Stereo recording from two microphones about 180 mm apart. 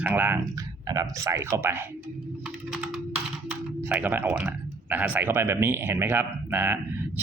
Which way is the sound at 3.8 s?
10° right (ahead or behind).